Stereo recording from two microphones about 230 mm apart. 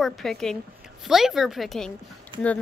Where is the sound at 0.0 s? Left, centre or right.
Centre.